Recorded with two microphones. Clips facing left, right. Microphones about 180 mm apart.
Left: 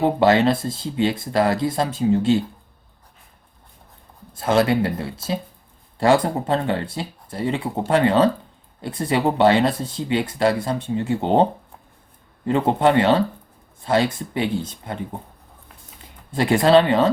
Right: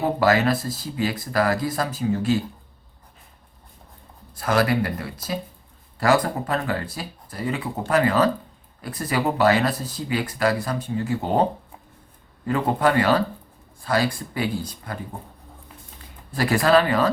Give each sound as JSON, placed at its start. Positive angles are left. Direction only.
{"t": 0.0, "sound": "speech", "side_deg": 25}
{"t": 4.4, "sound": "speech", "side_deg": 25}
{"t": 12.5, "sound": "speech", "side_deg": 25}